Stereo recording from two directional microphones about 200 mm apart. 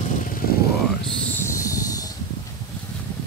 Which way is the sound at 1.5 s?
15° left (ahead or behind).